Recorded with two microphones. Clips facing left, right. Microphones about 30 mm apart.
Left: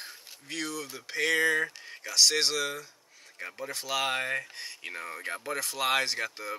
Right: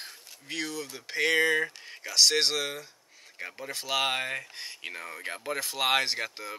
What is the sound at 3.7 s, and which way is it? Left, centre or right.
Speech, centre.